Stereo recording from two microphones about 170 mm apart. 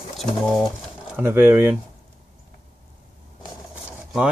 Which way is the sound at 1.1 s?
10° right (ahead or behind).